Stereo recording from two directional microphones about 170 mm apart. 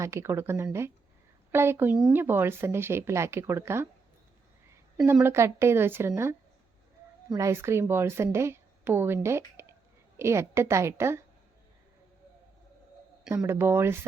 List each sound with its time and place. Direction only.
0.0 s speech: 15° right (ahead or behind)
5.2 s speech: 15° right (ahead or behind)
7.3 s speech: 15° right (ahead or behind)
13.3 s speech: 15° right (ahead or behind)